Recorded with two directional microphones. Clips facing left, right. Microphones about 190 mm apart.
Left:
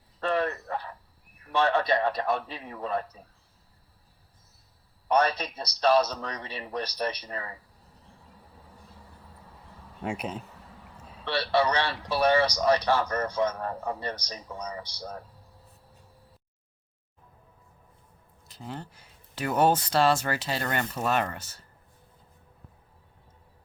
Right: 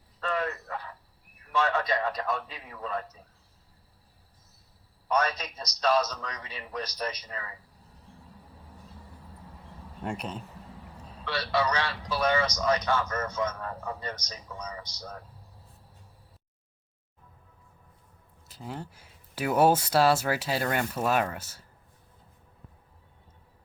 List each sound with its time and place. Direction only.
0.2 s cricket: 30° left (ahead or behind)
1.5 s a man's voice: 35° left (ahead or behind)
5.1 s a man's voice: 30° left (ahead or behind)
10.0 s speech: 5° left (ahead or behind)
11.3 s a man's voice: 30° left (ahead or behind)
18.4 s speech: 5° right (ahead or behind)